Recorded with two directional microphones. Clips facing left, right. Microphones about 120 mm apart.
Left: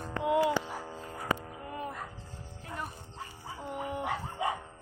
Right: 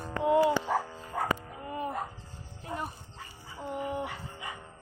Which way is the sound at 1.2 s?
80° right.